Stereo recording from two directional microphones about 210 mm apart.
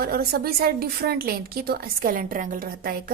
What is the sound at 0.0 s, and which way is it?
A woman's voice, 45° right (ahead or behind).